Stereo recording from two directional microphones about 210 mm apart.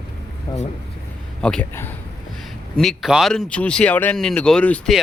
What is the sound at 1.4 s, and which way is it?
Speech, 5° left (ahead or behind).